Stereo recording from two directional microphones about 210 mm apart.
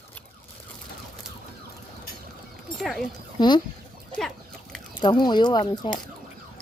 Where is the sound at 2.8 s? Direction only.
Centre (ahead or behind).